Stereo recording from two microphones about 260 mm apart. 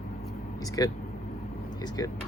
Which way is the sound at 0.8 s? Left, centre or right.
Centre.